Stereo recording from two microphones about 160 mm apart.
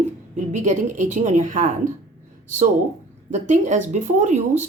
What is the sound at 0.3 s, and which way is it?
Speech, 50° right (ahead or behind).